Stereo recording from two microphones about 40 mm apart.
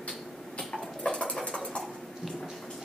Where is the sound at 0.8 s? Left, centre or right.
Left.